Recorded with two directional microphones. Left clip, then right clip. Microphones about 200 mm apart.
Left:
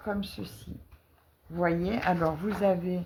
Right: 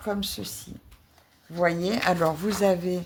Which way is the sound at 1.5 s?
45° right (ahead or behind).